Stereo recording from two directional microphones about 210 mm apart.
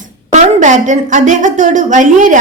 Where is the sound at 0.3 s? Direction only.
35° right (ahead or behind).